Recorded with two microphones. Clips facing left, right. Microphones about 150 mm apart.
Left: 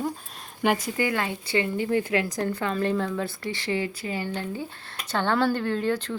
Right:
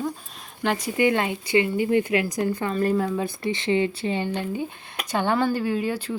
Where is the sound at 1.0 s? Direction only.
20° right (ahead or behind).